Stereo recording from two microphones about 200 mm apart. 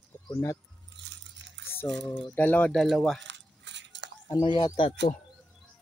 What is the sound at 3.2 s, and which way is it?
Crushing, 65° right (ahead or behind).